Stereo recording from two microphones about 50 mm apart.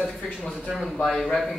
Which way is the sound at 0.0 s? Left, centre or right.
Centre.